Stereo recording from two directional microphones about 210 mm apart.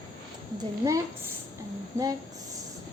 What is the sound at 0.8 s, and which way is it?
A woman's voice, 15° right (ahead or behind).